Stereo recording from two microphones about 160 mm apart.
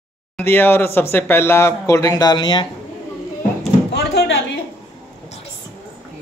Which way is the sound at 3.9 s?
90° left.